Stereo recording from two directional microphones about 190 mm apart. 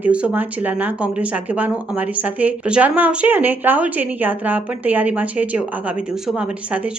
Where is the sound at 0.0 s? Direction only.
5° right (ahead or behind).